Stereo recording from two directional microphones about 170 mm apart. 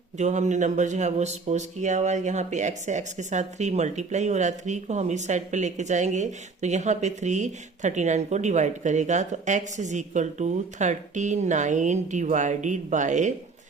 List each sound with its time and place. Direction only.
0.2 s speech: 45° right (ahead or behind)